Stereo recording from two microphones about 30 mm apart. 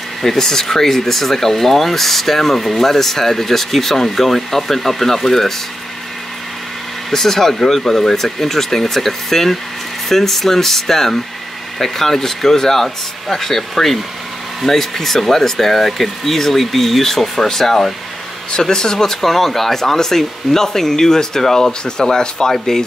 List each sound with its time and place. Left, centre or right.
0.2 s speech: centre
7.1 s speech: centre